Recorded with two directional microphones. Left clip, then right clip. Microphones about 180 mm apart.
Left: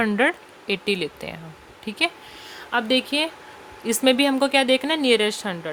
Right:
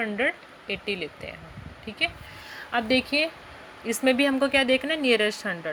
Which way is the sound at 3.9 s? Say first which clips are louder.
Left 3 dB; 25° left (ahead or behind).